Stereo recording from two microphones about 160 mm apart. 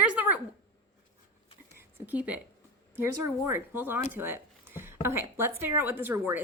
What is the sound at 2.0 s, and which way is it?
A woman's voice, 10° right (ahead or behind).